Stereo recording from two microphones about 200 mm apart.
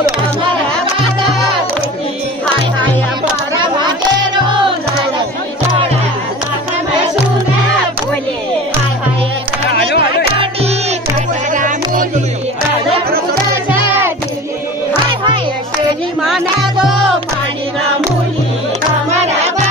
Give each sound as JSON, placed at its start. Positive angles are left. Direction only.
{"t": 3.5, "sound": "a sound", "side_deg": -25}
{"t": 9.7, "sound": "music", "side_deg": 55}
{"t": 10.4, "sound": "music", "side_deg": -30}
{"t": 16.2, "sound": "music", "side_deg": 0}